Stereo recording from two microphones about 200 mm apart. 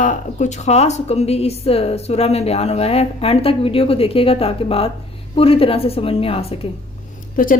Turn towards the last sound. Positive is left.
turn(degrees=45)  # may be behind; listen again after turning